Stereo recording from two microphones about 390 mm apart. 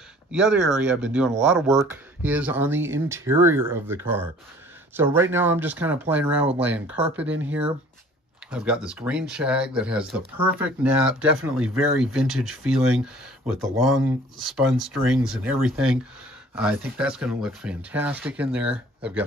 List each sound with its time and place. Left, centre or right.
0.3 s speech: centre